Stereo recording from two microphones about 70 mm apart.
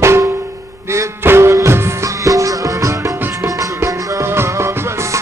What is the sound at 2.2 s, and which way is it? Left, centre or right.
Music, right.